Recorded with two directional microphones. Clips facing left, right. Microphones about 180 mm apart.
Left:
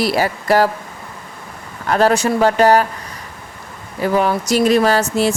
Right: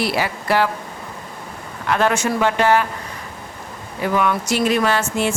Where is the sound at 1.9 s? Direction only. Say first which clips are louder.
Left 4 dB; 35° left (ahead or behind).